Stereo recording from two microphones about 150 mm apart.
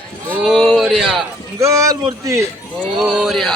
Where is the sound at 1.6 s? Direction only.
20° right (ahead or behind).